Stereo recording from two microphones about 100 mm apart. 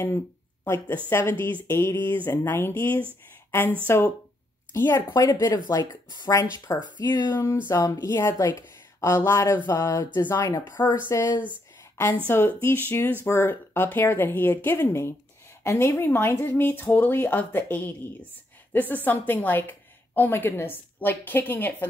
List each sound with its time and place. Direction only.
0.7 s speech: 20° left (ahead or behind)
5.1 s speech: 40° left (ahead or behind)
7.8 s speech: 30° left (ahead or behind)
11.8 s a sound: 30° left (ahead or behind)
12.3 s speech: 25° left (ahead or behind)